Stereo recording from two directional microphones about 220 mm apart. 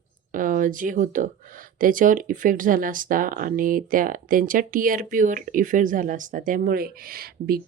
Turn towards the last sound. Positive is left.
turn(degrees=-45)  # may be behind; listen again after turning